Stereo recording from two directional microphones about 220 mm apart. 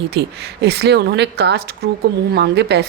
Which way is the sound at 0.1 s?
50° right (ahead or behind).